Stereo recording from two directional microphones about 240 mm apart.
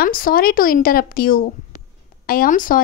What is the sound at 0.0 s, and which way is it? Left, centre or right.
A woman's voice, left.